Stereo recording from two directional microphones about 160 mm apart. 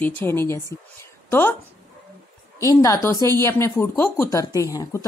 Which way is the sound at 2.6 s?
20° left (ahead or behind).